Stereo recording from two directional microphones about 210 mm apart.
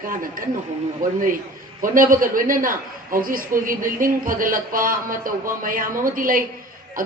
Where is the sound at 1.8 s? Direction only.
40° right (ahead or behind).